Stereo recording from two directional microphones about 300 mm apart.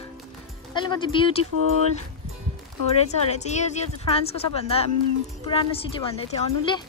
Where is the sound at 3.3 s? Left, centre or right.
Left.